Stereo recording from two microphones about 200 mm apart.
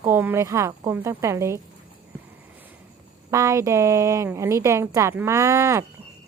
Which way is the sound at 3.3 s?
15° right (ahead or behind).